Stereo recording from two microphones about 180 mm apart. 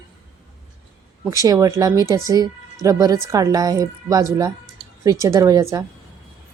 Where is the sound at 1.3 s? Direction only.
20° right (ahead or behind).